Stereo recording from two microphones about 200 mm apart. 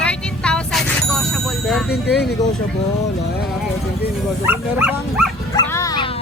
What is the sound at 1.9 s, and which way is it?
Speech, 55° left (ahead or behind).